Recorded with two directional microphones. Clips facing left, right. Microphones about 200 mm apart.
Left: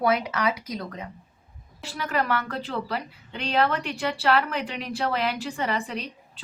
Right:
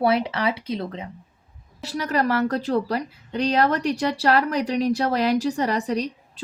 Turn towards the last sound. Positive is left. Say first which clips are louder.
# right 9 dB
turn(degrees=-40)  # may be behind; listen again after turning